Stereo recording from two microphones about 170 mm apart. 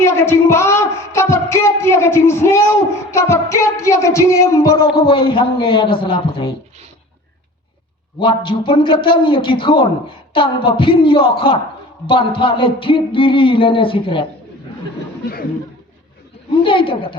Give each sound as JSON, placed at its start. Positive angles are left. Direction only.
{"t": 0.0, "sound": "speech", "side_deg": 15}
{"t": 4.9, "sound": "a man's voice", "side_deg": 30}
{"t": 8.2, "sound": "a man's voice", "side_deg": 30}
{"t": 16.6, "sound": "speech", "side_deg": 30}